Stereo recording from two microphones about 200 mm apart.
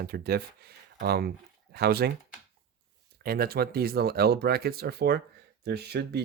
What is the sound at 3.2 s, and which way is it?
Speech, 50° right (ahead or behind).